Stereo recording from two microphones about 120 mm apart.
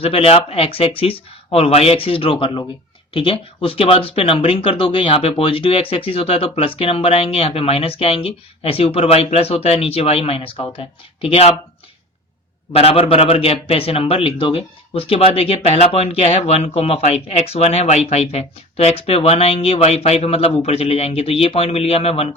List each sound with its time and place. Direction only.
0.0 s speech: 55° left (ahead or behind)
12.7 s speech: 55° left (ahead or behind)